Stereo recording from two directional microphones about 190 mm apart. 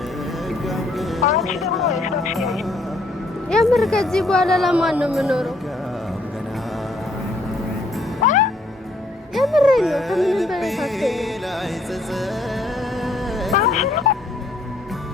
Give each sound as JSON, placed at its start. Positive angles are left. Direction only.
{"t": 0.6, "sound": "music", "side_deg": 0}
{"t": 1.4, "sound": "speech", "side_deg": 0}
{"t": 8.2, "sound": "music", "side_deg": 40}
{"t": 9.3, "sound": "speech", "side_deg": 0}
{"t": 13.0, "sound": "music", "side_deg": 0}